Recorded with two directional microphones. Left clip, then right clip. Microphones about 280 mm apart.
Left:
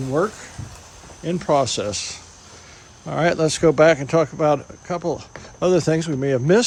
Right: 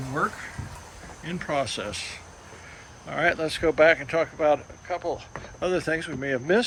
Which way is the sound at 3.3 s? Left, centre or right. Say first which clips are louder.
Left 7 dB; left.